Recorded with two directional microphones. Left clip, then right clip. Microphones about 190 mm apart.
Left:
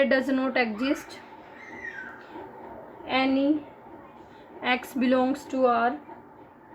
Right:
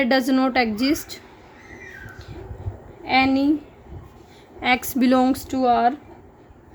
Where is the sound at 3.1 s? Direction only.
75° right (ahead or behind).